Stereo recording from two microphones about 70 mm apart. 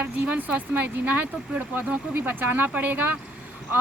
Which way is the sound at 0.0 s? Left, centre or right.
Right.